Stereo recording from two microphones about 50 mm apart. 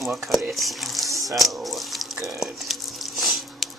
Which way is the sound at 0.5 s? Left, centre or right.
Centre.